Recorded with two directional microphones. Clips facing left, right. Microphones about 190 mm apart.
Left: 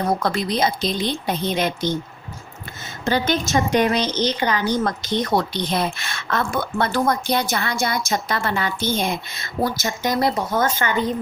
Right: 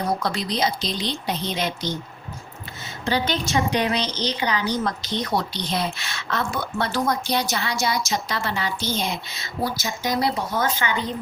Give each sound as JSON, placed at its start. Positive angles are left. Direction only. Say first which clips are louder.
{"t": 0.2, "sound": "a woman's voice", "louder": "left 3 dB", "side_deg": 55}
{"t": 3.0, "sound": "a woman's voice", "louder": "left 3 dB", "side_deg": 45}